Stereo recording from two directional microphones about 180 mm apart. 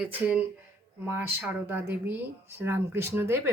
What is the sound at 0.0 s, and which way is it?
Speech, 10° right (ahead or behind).